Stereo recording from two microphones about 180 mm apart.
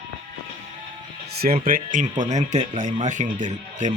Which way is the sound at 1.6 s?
50° right (ahead or behind).